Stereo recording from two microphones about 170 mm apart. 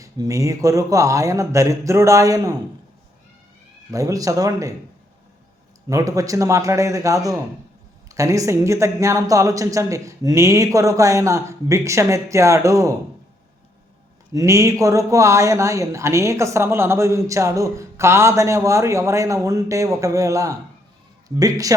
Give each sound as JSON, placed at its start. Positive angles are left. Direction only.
{"t": 0.0, "sound": "speech", "side_deg": -20}
{"t": 3.9, "sound": "speech", "side_deg": -20}
{"t": 5.9, "sound": "speech", "side_deg": -20}
{"t": 14.3, "sound": "a man's voice", "side_deg": -20}